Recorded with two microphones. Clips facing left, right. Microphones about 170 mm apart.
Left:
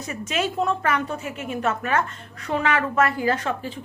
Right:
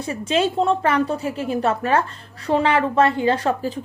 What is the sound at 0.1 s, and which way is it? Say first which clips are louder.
A woman's voice: right 6 dB; 30° right (ahead or behind).